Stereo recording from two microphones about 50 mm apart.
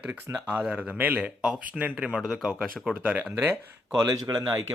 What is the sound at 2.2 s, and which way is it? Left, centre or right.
Speech, centre.